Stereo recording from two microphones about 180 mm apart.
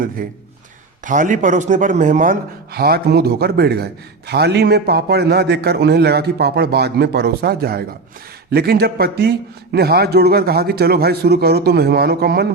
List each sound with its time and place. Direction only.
0.2 s a man's voice: 50° right (ahead or behind)